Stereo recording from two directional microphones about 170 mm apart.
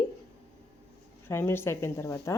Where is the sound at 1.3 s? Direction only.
15° left (ahead or behind).